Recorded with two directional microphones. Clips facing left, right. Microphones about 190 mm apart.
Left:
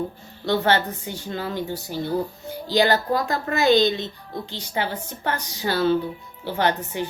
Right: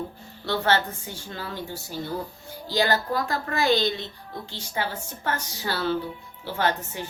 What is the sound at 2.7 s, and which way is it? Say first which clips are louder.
A woman's voice: left 4 dB; 20° left (ahead or behind).